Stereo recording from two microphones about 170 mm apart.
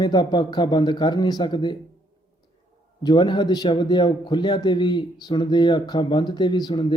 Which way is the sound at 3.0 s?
25° left (ahead or behind).